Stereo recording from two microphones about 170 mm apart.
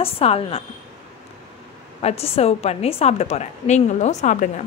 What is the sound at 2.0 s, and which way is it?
Speech, 35° left (ahead or behind).